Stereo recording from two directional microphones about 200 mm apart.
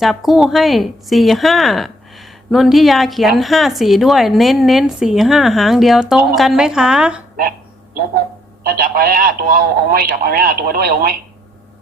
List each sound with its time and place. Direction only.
0.0 s a woman's voice: centre (ahead or behind)
8.6 s speech: 50° right (ahead or behind)